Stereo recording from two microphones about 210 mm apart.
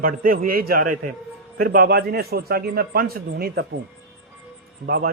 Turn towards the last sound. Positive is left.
turn(degrees=-45)  # may be behind; listen again after turning